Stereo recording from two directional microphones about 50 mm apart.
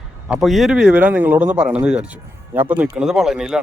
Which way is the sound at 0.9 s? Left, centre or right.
Right.